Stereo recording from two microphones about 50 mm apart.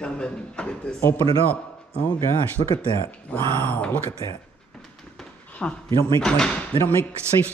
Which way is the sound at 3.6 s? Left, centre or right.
Left.